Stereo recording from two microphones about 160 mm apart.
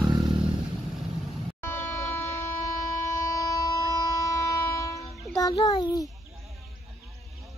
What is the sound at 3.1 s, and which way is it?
Train, 20° left (ahead or behind).